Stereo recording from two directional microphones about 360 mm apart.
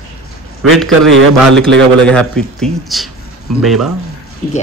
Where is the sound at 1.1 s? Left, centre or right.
Right.